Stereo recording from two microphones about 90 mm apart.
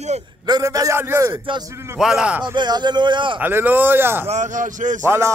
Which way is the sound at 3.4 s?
20° right (ahead or behind).